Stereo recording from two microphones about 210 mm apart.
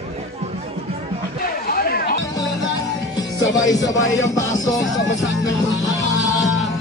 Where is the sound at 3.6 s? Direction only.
15° left (ahead or behind).